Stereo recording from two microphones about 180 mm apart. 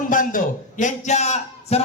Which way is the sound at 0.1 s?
50° left (ahead or behind).